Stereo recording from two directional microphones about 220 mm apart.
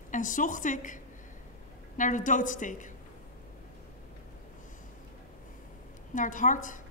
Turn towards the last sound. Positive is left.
turn(degrees=35)  # may be behind; listen again after turning